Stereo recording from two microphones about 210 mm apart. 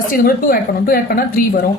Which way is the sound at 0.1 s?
40° left (ahead or behind).